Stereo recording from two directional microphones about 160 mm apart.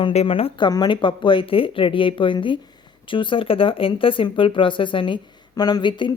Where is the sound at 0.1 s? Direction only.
40° left (ahead or behind).